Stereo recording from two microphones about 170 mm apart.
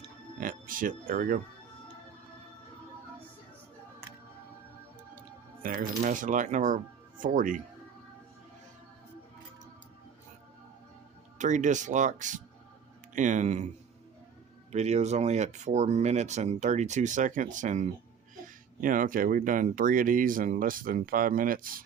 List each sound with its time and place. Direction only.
0.3 s speech: 55° right (ahead or behind)
5.6 s speech: 50° right (ahead or behind)
11.3 s speech: 45° right (ahead or behind)
14.7 s speech: 40° right (ahead or behind); by 21.8 s 55° right (ahead or behind)